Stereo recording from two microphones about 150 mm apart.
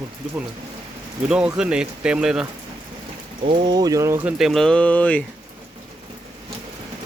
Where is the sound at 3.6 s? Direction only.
25° right (ahead or behind).